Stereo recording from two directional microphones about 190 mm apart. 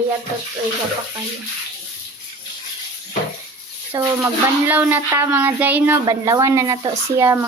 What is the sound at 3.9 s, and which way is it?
Speech, 15° right (ahead or behind).